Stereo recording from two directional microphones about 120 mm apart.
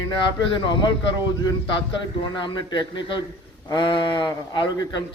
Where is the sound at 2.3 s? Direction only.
40° left (ahead or behind).